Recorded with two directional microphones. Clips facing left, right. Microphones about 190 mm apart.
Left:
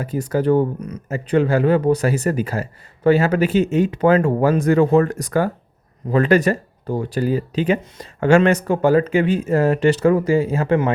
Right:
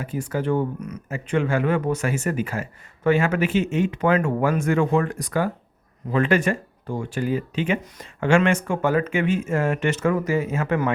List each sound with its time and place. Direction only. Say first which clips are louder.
0.0 s speech: left 6 dB; 40° left (ahead or behind)